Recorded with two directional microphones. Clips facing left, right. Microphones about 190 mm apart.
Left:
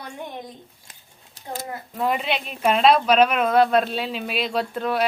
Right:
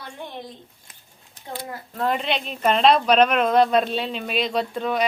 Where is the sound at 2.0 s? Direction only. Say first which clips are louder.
Even; 5° left (ahead or behind).